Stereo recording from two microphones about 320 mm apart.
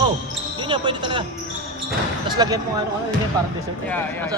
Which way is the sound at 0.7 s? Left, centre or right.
Centre.